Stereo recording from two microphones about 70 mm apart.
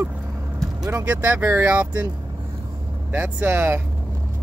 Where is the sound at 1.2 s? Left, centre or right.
Right.